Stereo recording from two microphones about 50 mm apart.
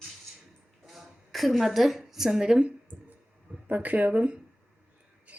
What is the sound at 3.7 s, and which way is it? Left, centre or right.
Speech, right.